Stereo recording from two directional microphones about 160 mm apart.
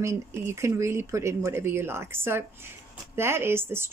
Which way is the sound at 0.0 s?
15° right (ahead or behind).